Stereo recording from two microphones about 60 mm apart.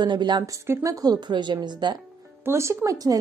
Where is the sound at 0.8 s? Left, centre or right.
Right.